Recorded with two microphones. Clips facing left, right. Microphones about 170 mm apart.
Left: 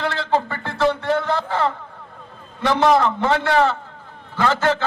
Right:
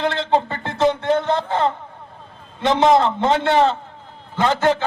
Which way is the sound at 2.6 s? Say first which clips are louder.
Right 1 dB; 20° right (ahead or behind).